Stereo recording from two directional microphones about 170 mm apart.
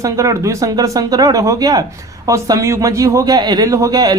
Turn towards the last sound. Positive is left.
turn(degrees=-20)  # may be behind; listen again after turning